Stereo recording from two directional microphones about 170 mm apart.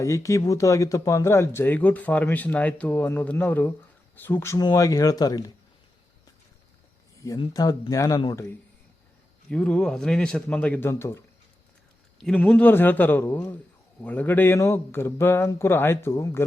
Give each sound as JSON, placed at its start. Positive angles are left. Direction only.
{"t": 0.0, "sound": "speech", "side_deg": 20}
{"t": 7.3, "sound": "speech", "side_deg": 25}
{"t": 9.5, "sound": "speech", "side_deg": 5}
{"t": 12.2, "sound": "speech", "side_deg": 10}